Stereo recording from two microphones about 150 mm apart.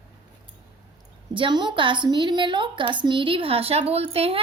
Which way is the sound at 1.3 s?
30° right (ahead or behind).